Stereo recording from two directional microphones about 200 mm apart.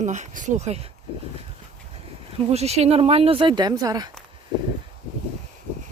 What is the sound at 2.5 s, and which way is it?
Speech, 30° right (ahead or behind).